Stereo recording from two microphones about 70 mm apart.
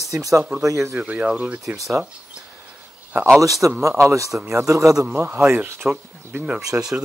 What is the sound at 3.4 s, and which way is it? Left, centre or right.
Speech, right.